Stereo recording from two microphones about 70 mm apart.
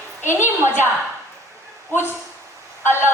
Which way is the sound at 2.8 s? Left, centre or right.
Left.